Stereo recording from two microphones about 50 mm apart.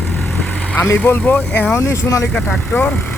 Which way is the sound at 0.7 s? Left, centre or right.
Left.